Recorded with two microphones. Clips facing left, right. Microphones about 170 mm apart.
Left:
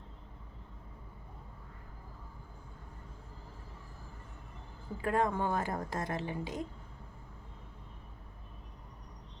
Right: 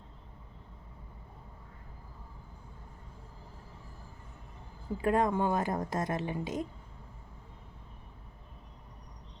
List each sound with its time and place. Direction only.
5.0 s a woman's voice: 20° right (ahead or behind)